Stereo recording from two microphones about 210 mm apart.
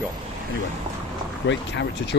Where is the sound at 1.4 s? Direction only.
60° left (ahead or behind).